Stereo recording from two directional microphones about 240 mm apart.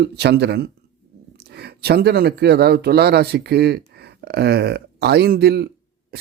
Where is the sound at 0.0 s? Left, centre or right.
Right.